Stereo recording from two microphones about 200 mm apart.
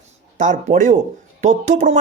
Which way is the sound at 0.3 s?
40° right (ahead or behind).